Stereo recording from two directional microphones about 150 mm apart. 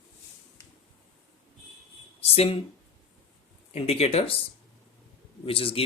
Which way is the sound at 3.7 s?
40° left (ahead or behind).